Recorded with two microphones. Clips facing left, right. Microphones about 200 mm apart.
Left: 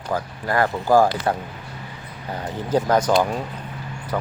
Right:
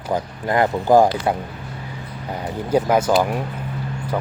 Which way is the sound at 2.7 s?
10° right (ahead or behind).